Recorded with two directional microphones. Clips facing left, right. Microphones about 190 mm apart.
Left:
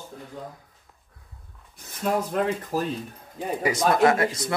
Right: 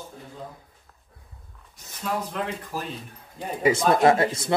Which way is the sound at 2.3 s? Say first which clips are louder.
Left 6 dB; 45° left (ahead or behind).